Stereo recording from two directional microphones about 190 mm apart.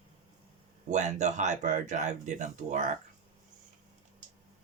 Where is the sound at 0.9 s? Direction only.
40° right (ahead or behind).